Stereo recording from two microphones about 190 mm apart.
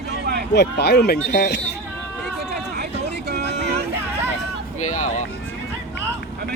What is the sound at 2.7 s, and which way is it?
Vehicle, 60° right (ahead or behind).